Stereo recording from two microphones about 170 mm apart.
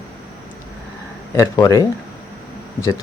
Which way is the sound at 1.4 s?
20° left (ahead or behind).